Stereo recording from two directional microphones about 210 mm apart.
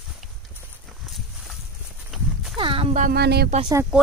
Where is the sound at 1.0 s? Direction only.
Centre (ahead or behind).